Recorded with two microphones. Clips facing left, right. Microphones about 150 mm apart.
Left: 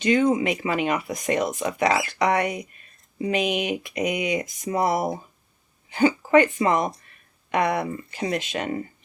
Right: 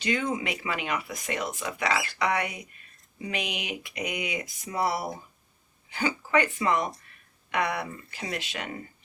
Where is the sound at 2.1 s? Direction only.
45° left (ahead or behind).